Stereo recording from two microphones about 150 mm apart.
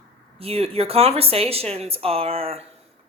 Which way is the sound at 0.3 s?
40° right (ahead or behind).